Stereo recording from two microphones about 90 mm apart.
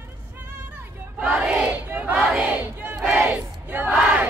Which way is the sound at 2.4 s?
20° right (ahead or behind).